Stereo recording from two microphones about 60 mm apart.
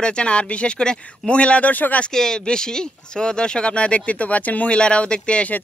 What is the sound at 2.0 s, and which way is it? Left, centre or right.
Speech, centre.